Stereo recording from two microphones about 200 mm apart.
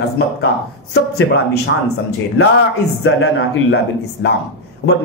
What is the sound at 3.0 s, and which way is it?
A man's voice, 70° left (ahead or behind).